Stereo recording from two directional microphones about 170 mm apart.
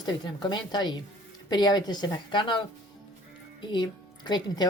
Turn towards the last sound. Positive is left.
turn(degrees=25)  # may be behind; listen again after turning